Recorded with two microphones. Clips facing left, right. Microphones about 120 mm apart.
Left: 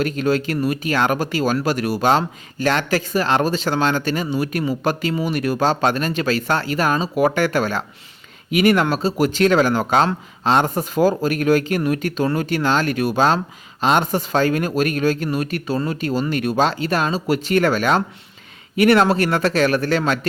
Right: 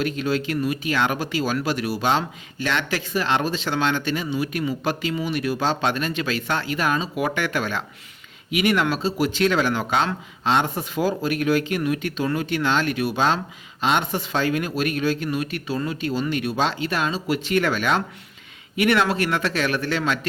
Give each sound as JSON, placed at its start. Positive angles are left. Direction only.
{"t": 0.0, "sound": "speech", "side_deg": 45}